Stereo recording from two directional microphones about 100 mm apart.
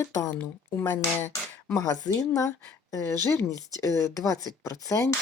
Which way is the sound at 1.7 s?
35° left (ahead or behind).